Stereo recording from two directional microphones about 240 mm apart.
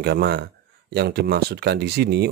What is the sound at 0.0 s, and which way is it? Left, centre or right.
Speech, right.